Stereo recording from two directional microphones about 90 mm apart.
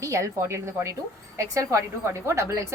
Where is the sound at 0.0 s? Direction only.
35° right (ahead or behind).